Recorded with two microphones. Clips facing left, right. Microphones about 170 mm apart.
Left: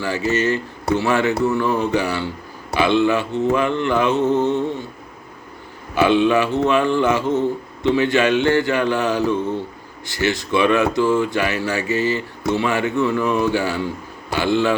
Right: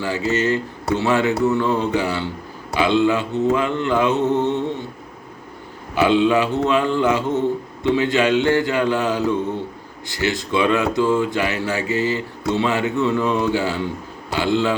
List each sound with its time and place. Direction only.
0.0 s a man's voice: 20° right (ahead or behind)
6.1 s a man's voice: 15° right (ahead or behind)